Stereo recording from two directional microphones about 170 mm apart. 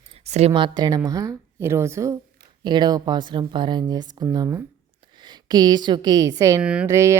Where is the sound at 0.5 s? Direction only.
25° right (ahead or behind).